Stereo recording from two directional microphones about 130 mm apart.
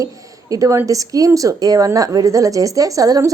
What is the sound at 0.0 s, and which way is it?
Speech, 25° right (ahead or behind).